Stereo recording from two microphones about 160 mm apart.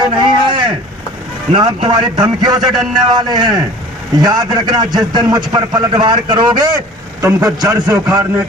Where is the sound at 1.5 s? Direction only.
30° right (ahead or behind).